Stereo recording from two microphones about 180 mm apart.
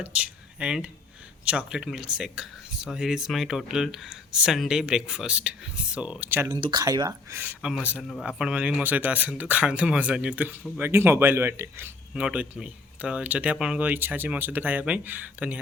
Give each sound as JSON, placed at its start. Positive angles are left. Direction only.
{"t": 0.0, "sound": "speech", "side_deg": -5}
{"t": 6.5, "sound": "speech", "side_deg": -25}